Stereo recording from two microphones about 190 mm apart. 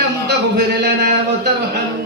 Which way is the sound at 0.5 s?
60° right (ahead or behind).